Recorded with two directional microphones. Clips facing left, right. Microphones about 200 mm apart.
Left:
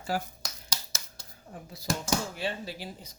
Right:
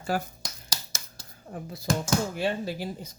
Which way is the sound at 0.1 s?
55° right (ahead or behind).